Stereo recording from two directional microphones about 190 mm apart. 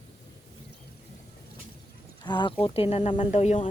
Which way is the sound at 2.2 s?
25° left (ahead or behind).